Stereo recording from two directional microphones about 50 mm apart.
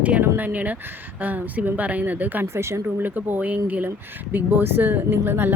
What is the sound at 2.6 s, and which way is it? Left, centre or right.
Speech, right.